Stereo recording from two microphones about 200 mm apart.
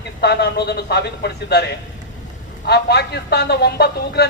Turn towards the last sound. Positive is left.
turn(degrees=55)  # may be behind; listen again after turning